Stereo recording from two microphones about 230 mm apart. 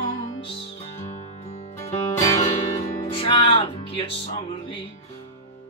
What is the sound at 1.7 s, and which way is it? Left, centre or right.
Music, centre.